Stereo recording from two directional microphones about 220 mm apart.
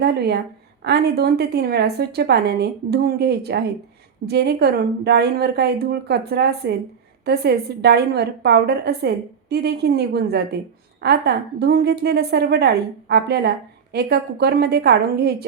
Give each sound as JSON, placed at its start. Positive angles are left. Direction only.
{"t": 0.0, "sound": "a woman's voice", "side_deg": -50}